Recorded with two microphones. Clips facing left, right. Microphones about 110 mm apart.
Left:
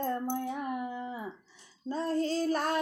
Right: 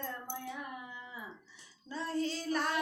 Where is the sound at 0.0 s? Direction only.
50° left (ahead or behind).